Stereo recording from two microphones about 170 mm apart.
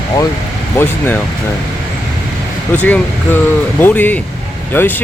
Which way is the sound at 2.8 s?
10° left (ahead or behind).